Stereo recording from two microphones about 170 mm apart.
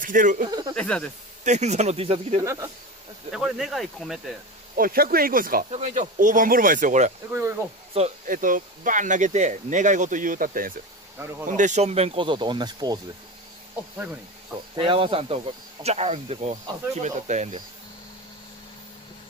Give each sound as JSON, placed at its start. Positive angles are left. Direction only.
{"t": 0.0, "sound": "speech", "side_deg": -50}
{"t": 0.5, "sound": "speech", "side_deg": -20}
{"t": 0.7, "sound": "speech", "side_deg": 5}
{"t": 1.4, "sound": "speech", "side_deg": -40}
{"t": 2.4, "sound": "speech", "side_deg": -20}
{"t": 3.3, "sound": "speech", "side_deg": 0}
{"t": 4.7, "sound": "speech", "side_deg": -60}
{"t": 5.7, "sound": "speech", "side_deg": -45}
{"t": 8.0, "sound": "speech", "side_deg": -35}
{"t": 8.3, "sound": "speech", "side_deg": -50}
{"t": 14.8, "sound": "speech", "side_deg": -30}